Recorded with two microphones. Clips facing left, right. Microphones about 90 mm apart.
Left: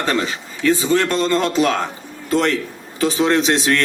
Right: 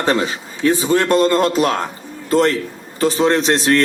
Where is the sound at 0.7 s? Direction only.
55° right (ahead or behind).